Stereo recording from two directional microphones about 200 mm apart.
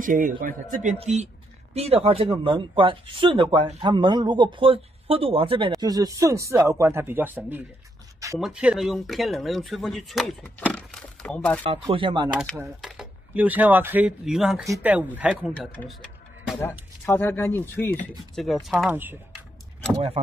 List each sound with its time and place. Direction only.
0.0 s a man's voice: 40° right (ahead or behind); by 11.6 s 5° left (ahead or behind)
11.9 s speech: 25° right (ahead or behind)
12.5 s speech: 5° right (ahead or behind)
15.5 s speech: 5° left (ahead or behind)
18.3 s speech: centre (ahead or behind)